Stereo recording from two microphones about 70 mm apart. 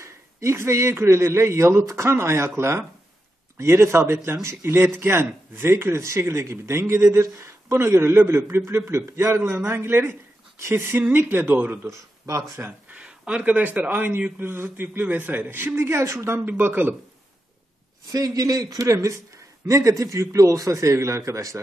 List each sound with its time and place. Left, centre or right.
0.0 s speech: right
11.9 s speech: right
12.9 s a man's voice: centre; by 16.3 s right
16.3 s a man's voice: right
18.1 s a man's voice: right